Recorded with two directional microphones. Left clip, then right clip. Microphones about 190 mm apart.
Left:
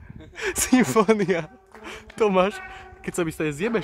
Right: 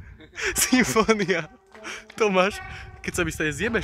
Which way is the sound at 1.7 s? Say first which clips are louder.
Right 3 dB; centre (ahead or behind).